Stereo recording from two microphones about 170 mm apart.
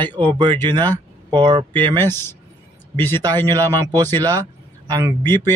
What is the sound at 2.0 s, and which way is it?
Speech, 15° left (ahead or behind).